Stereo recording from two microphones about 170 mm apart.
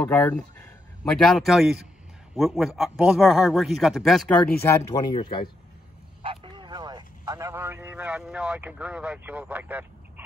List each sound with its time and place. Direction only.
0.0 s a man's voice: 10° left (ahead or behind)
4.6 s speech: 25° left (ahead or behind)
5.1 s speech: 35° left (ahead or behind)
6.2 s vehicle: 30° right (ahead or behind); by 10.2 s 10° right (ahead or behind)